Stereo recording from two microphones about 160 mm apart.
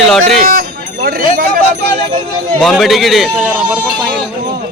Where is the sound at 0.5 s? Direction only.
75° right (ahead or behind).